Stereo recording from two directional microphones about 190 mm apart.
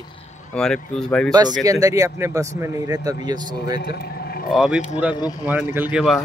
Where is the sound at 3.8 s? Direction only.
55° left (ahead or behind).